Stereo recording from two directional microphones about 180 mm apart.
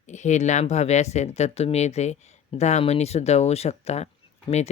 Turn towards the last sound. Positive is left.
turn(degrees=35)  # may be behind; listen again after turning